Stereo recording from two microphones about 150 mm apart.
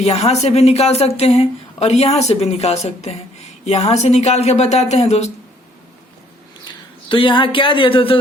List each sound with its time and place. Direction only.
0.0 s speech: 45° left (ahead or behind)
7.1 s speech: 35° left (ahead or behind)